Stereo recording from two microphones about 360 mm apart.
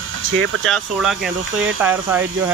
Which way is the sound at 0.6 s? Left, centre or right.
Centre.